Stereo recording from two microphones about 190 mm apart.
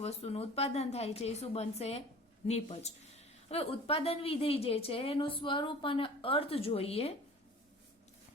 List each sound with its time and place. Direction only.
0.0 s a woman's voice: 30° left (ahead or behind)